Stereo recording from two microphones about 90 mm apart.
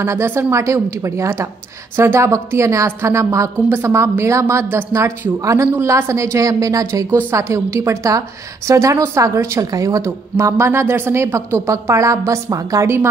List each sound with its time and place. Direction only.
0.0 s a woman's voice: 30° right (ahead or behind)